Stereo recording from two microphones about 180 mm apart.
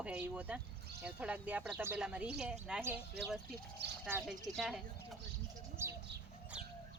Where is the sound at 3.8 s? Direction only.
65° right (ahead or behind).